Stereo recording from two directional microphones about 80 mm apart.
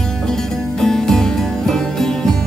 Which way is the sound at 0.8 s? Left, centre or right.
Centre.